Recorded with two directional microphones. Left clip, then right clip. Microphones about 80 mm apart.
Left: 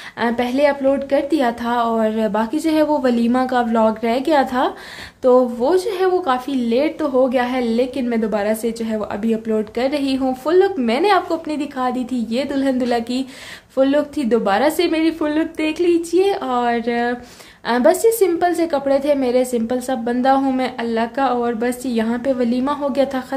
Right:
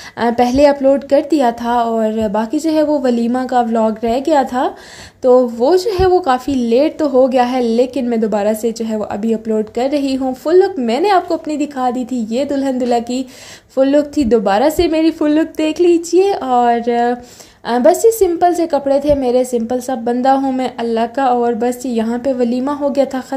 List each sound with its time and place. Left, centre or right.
0.2 s a woman's voice: right
1.4 s a woman's voice: right
5.6 s a woman's voice: right
8.9 s a woman's voice: right
19.5 s speech: right
20.2 s a woman's voice: right